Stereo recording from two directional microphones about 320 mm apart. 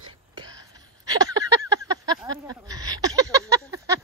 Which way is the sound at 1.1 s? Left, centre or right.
Centre.